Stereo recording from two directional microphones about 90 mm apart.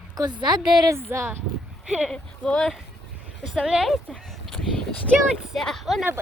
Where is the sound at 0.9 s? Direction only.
30° right (ahead or behind).